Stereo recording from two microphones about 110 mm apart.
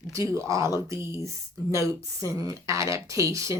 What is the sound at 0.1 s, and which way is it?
A woman's voice, 30° right (ahead or behind).